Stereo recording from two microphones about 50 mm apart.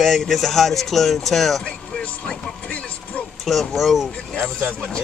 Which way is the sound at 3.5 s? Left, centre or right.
Centre.